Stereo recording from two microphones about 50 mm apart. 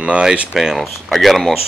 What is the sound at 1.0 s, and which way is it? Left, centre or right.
Speech, centre.